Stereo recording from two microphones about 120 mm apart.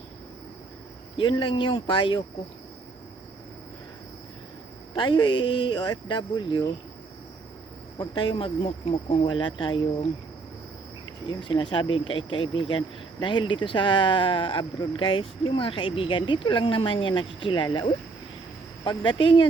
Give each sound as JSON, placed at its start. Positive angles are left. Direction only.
{"t": 1.1, "sound": "speech", "side_deg": 45}
{"t": 4.9, "sound": "speech", "side_deg": 40}
{"t": 7.9, "sound": "speech", "side_deg": 40}
{"t": 11.3, "sound": "speech", "side_deg": 40}